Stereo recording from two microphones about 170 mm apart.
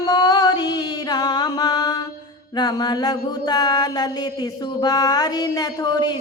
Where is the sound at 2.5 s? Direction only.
25° left (ahead or behind).